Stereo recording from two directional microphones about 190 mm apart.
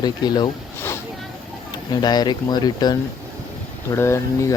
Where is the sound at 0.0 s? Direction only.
20° left (ahead or behind).